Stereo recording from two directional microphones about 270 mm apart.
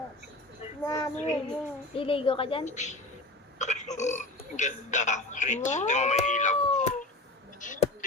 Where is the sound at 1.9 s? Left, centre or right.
Centre.